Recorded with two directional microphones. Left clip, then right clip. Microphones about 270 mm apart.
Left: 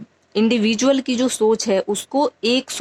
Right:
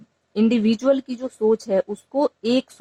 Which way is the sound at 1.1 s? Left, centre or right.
Left.